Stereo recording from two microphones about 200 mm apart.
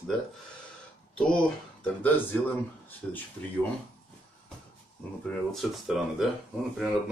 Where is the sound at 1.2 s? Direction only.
5° left (ahead or behind).